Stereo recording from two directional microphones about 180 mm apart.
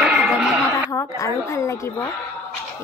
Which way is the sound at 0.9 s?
15° left (ahead or behind).